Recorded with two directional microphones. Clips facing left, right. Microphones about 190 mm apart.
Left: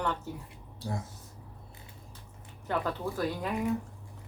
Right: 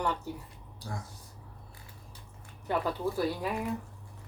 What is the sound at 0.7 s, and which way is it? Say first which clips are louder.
Speech: left 5 dB; 25° left (ahead or behind).